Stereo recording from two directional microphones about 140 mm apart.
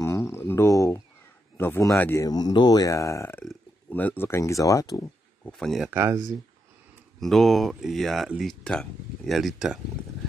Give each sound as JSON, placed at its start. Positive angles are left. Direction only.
{"t": 0.0, "sound": "a sound", "side_deg": 20}
{"t": 1.6, "sound": "speech", "side_deg": 20}
{"t": 2.2, "sound": "speech", "side_deg": 30}
{"t": 5.4, "sound": "a sound", "side_deg": 5}
{"t": 5.9, "sound": "speech", "side_deg": -15}
{"t": 7.2, "sound": "speech", "side_deg": 0}